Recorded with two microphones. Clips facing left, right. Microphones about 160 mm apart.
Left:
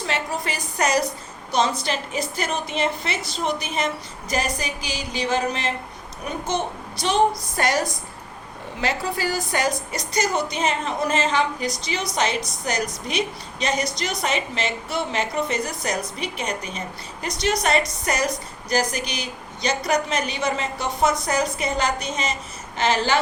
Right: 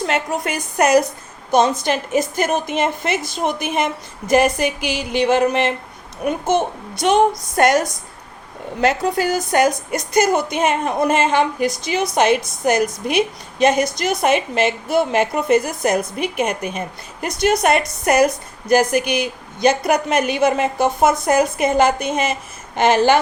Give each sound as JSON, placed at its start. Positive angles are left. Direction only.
{"t": 0.0, "sound": "a woman's voice", "side_deg": -50}
{"t": 7.0, "sound": "a woman's voice", "side_deg": -50}
{"t": 9.1, "sound": "a woman's voice", "side_deg": -50}